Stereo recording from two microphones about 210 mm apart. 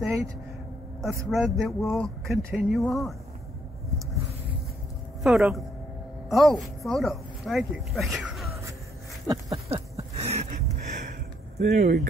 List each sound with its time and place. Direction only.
0.0 s speech: centre (ahead or behind)
1.3 s speech: centre (ahead or behind)
5.2 s a woman's voice: centre (ahead or behind)
9.3 s a sound: 20° right (ahead or behind); by 11.8 s 35° right (ahead or behind)
11.8 s speech: 50° right (ahead or behind)